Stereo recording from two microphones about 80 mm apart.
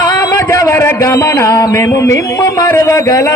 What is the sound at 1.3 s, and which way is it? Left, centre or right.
A man's voice, left.